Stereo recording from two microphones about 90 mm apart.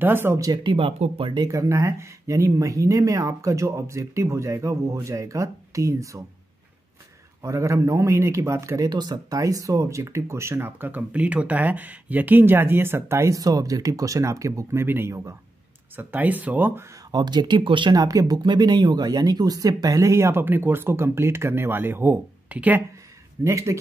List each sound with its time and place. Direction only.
0.0 s speech: 25° right (ahead or behind)
0.7 s speech: 90° right
1.5 s a man's voice: 35° right (ahead or behind)
7.4 s a man's voice: 35° right (ahead or behind)
13.4 s a man's voice: 40° right (ahead or behind)
16.0 s speech: 20° right (ahead or behind)
17.1 s speech: 50° right (ahead or behind)
17.9 s speech: 45° right (ahead or behind); by 22.8 s 20° right (ahead or behind)
23.4 s a man's voice: 35° right (ahead or behind)